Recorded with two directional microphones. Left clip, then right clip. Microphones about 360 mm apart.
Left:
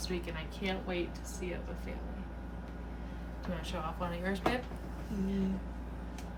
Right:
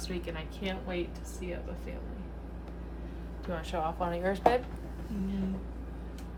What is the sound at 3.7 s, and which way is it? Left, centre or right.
Speech, centre.